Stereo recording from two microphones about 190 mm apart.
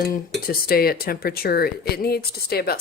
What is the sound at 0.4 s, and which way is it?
Speech, 50° left (ahead or behind).